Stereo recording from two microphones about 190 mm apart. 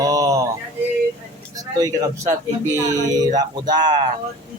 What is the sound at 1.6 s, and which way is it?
Speech, 20° right (ahead or behind).